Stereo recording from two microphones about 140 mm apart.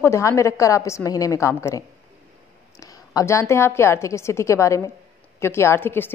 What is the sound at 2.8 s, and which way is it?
A woman's voice, 25° left (ahead or behind).